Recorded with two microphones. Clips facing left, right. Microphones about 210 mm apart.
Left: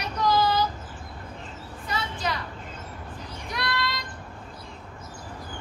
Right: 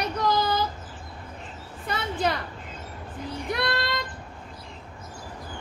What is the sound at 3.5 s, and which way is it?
Child singing, 55° right (ahead or behind).